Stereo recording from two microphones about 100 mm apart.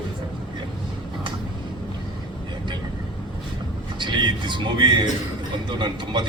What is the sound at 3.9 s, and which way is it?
Music, 50° right (ahead or behind).